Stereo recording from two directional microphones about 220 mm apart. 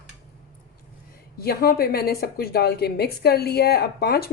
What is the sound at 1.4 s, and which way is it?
A woman's voice, 45° left (ahead or behind).